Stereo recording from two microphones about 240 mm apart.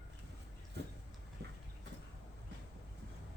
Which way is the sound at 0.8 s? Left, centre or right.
Right.